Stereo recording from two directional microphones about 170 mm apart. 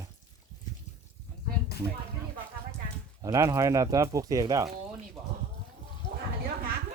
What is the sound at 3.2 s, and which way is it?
Speech, 15° right (ahead or behind).